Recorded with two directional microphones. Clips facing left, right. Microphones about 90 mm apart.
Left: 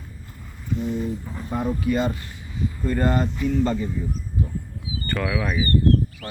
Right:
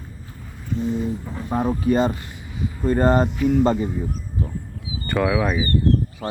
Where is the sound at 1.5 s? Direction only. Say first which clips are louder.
Right 4 dB; 35° right (ahead or behind).